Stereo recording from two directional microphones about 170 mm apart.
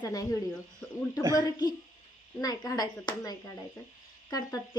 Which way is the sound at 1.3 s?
25° left (ahead or behind).